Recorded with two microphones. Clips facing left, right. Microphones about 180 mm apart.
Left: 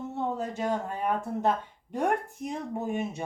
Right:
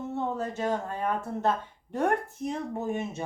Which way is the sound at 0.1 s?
15° left (ahead or behind).